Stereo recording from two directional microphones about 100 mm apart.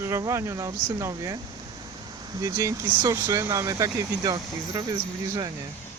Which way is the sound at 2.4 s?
35° right (ahead or behind).